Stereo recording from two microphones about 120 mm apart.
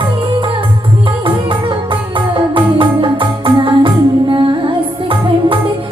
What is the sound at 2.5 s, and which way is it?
Music, 45° right (ahead or behind).